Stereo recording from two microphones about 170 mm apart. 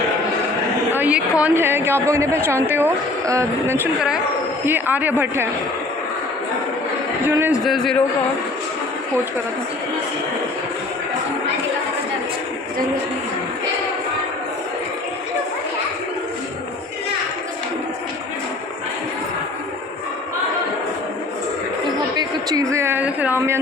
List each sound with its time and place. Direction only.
0.9 s a sound: 10° right (ahead or behind)
2.0 s a woman's voice: 15° right (ahead or behind)
7.3 s a woman's voice: 15° right (ahead or behind)
7.6 s a man's voice: centre (ahead or behind)
22.2 s speech: 20° right (ahead or behind)